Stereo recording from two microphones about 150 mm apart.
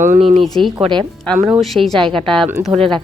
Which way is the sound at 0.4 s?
Centre (ahead or behind).